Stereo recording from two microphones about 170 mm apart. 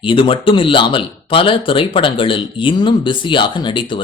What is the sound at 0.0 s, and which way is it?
Speech, 30° left (ahead or behind).